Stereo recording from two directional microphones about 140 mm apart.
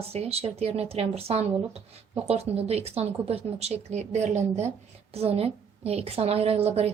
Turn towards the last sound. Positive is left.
turn(degrees=-45)  # may be behind; listen again after turning